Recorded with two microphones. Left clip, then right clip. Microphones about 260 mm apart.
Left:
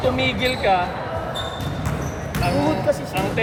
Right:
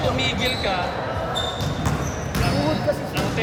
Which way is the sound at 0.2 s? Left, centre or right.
Left.